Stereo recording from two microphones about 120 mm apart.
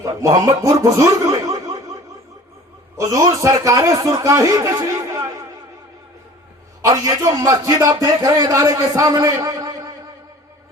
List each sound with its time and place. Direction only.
0.0 s speech: 30° right (ahead or behind)
3.0 s a man's voice: 30° right (ahead or behind)
6.8 s a man's voice: 30° right (ahead or behind)